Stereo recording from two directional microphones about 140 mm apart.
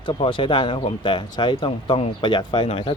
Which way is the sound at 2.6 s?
45° left (ahead or behind).